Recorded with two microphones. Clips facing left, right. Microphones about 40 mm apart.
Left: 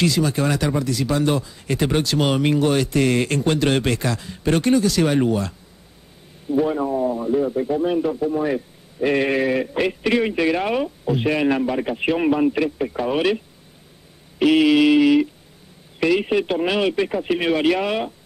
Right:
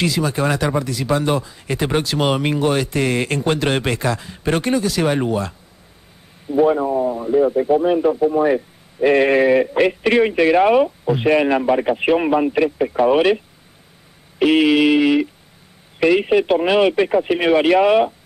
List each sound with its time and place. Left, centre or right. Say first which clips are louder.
0.0 s speech: even; centre
6.5 s a man's voice: right 4 dB; centre
14.4 s a man's voice: right 1 dB; centre